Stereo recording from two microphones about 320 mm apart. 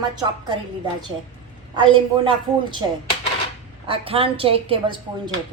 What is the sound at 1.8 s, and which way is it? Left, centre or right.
A woman's voice, centre.